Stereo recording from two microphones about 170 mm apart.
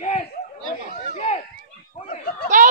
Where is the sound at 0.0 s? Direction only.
40° left (ahead or behind).